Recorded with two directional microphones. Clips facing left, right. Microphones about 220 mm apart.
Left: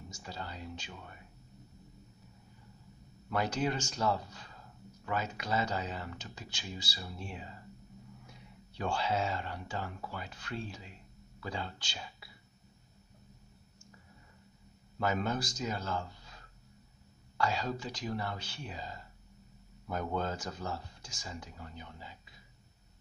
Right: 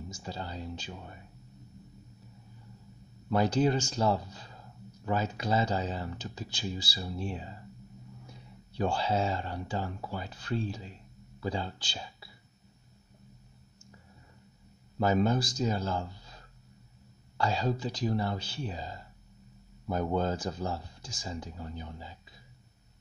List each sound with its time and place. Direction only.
0.1 s speech: 30° right (ahead or behind)
3.3 s speech: 30° right (ahead or behind)
8.7 s speech: 35° right (ahead or behind)
15.0 s speech: 35° right (ahead or behind)
17.4 s speech: 30° right (ahead or behind)